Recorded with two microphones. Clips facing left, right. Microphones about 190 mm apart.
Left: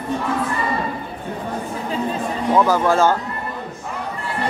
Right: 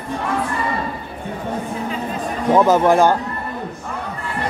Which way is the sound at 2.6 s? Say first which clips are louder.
Right 3 dB; 20° right (ahead or behind).